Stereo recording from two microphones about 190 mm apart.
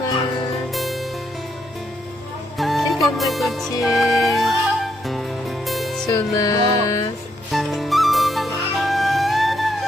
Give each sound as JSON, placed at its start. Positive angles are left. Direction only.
{"t": 0.7, "sound": "music", "side_deg": 0}
{"t": 2.6, "sound": "music", "side_deg": 0}
{"t": 6.1, "sound": "music", "side_deg": 20}
{"t": 7.5, "sound": "music", "side_deg": 0}